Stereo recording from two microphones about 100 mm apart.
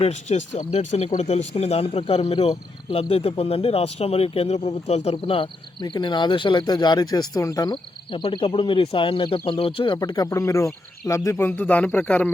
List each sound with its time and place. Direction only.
0.3 s speech: 90° left; by 5.5 s 70° left (ahead or behind)
5.8 s speech: 50° left (ahead or behind)
7.7 s speech: 60° left (ahead or behind)
10.0 s speech: 40° left (ahead or behind); by 12.3 s 15° left (ahead or behind)